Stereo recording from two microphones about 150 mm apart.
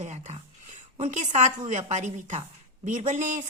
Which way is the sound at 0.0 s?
50° right (ahead or behind).